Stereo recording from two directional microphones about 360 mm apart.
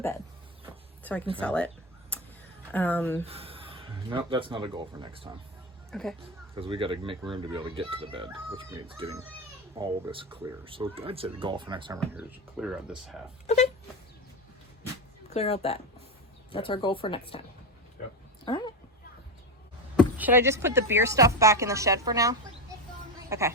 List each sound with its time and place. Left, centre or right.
1.4 s a sound: centre
2.7 s speech: centre
3.2 s speech: centre
5.9 s speech: centre
6.5 s speech: centre
13.5 s a sound: centre
15.3 s speech: centre
18.4 s speech: centre
20.0 s speech: centre